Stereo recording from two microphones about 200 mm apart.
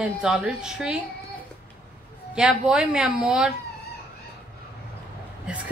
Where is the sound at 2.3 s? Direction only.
5° right (ahead or behind).